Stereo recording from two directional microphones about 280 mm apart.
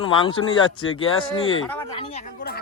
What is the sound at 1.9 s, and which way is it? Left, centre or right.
Speech, centre.